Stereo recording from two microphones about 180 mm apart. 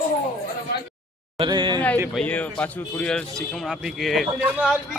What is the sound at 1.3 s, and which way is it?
Speech, 25° right (ahead or behind).